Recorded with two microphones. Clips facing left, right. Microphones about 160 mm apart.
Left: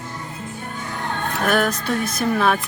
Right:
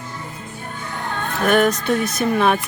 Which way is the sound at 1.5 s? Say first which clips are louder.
Right 5 dB; centre (ahead or behind).